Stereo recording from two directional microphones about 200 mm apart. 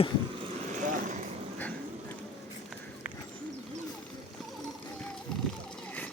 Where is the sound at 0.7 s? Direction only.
40° right (ahead or behind).